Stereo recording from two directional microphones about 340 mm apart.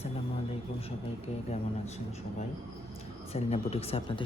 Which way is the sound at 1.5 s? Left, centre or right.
Centre.